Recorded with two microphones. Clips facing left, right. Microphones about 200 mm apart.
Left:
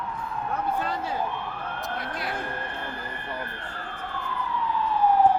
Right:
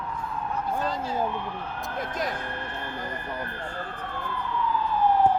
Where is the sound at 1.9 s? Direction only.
45° right (ahead or behind).